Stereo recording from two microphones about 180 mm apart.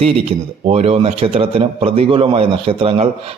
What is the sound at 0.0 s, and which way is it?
A man's voice, 35° right (ahead or behind).